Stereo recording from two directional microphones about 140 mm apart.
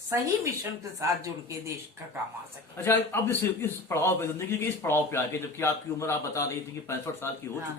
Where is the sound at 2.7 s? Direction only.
15° left (ahead or behind).